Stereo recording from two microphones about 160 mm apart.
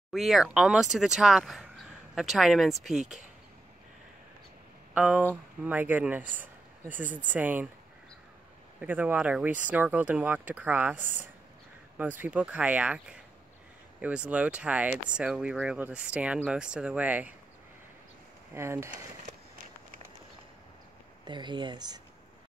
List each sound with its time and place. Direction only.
0.1 s speech: centre (ahead or behind)
3.0 s speech: 45° right (ahead or behind)
4.9 s speech: 10° right (ahead or behind)
6.4 s a sound: 10° right (ahead or behind)
7.1 s speech: 55° right (ahead or behind)
7.3 s speech: 10° right (ahead or behind)
8.8 s speech: 10° right (ahead or behind)
11.0 s speech: 55° right (ahead or behind)
12.0 s speech: 10° right (ahead or behind)
18.5 s speech: 15° right (ahead or behind)
21.3 s speech: 30° right (ahead or behind)